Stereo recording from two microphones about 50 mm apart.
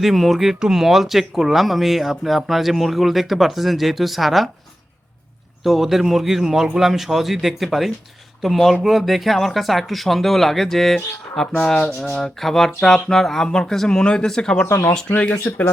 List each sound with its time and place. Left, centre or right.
0.0 s speech: centre
5.6 s speech: centre
14.7 s speech: left
15.2 s speech: left